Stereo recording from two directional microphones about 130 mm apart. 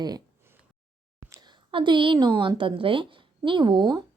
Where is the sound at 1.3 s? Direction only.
35° right (ahead or behind).